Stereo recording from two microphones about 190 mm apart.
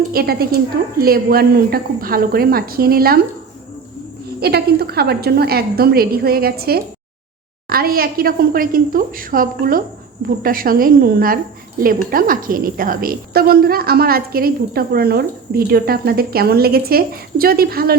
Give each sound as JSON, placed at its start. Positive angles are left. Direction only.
{"t": 0.1, "sound": "a woman's voice", "side_deg": -55}
{"t": 4.4, "sound": "a woman's voice", "side_deg": -55}